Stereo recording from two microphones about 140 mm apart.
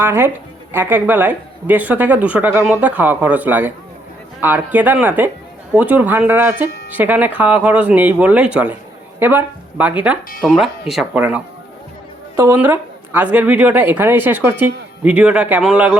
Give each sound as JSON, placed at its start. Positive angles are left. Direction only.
{"t": 0.0, "sound": "speech", "side_deg": -15}
{"t": 12.5, "sound": "speech", "side_deg": -15}